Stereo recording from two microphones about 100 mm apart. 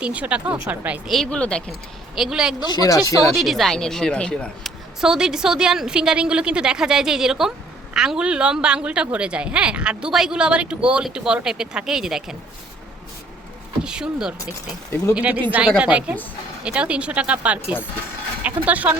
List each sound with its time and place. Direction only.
0.0 s a woman's voice: 10° right (ahead or behind)
1.0 s speech: 5° left (ahead or behind)
2.1 s speech: 5° right (ahead or behind)
2.6 s speech: 40° left (ahead or behind)
3.3 s speech: centre (ahead or behind)
4.9 s a woman's voice: 5° right (ahead or behind)
13.8 s a woman's voice: 10° right (ahead or behind)